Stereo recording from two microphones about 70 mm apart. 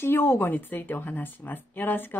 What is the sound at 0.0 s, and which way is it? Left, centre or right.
Speech, left.